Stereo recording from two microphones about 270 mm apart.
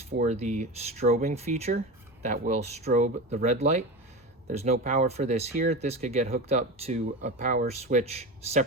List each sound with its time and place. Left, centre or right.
0.2 s speech: right